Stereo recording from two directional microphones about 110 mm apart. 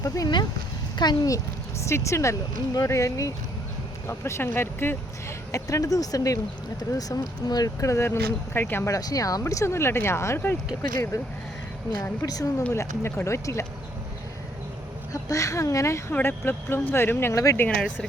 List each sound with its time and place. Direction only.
0.0 s speech: 35° left (ahead or behind)
1.8 s speech: 25° left (ahead or behind)
9.0 s speech: 35° left (ahead or behind)
11.1 s speech: 30° left (ahead or behind)
15.1 s speech: 30° left (ahead or behind)
17.7 s speech: 5° left (ahead or behind)